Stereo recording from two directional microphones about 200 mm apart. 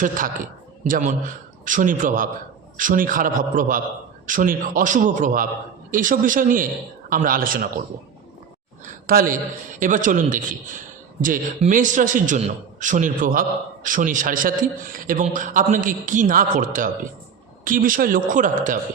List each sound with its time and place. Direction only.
0.0 s a man's voice: 40° right (ahead or behind)
8.8 s a man's voice: 45° right (ahead or behind)